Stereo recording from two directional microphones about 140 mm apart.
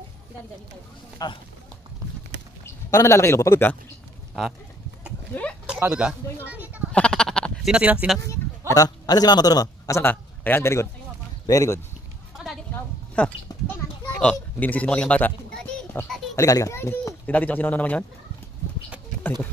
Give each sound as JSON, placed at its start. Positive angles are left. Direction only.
{"t": 1.1, "sound": "speech", "side_deg": 30}
{"t": 2.6, "sound": "a man's voice", "side_deg": 20}
{"t": 5.3, "sound": "speech", "side_deg": 10}
{"t": 5.7, "sound": "speech", "side_deg": -10}
{"t": 6.4, "sound": "a sound", "side_deg": -10}
{"t": 6.9, "sound": "sheep", "side_deg": 5}
{"t": 7.7, "sound": "speech", "side_deg": -10}
{"t": 8.3, "sound": "a man's voice", "side_deg": 25}
{"t": 12.7, "sound": "a sound", "side_deg": 10}
{"t": 13.5, "sound": "children playing", "side_deg": 25}
{"t": 14.3, "sound": "speech", "side_deg": 10}
{"t": 16.3, "sound": "speech", "side_deg": 25}